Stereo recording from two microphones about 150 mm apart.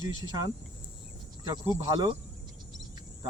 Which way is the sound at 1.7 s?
25° right (ahead or behind).